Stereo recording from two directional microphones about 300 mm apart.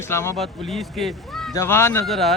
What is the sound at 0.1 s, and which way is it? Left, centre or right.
Speech, centre.